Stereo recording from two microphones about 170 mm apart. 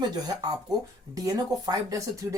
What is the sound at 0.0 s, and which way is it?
Speech, 25° right (ahead or behind).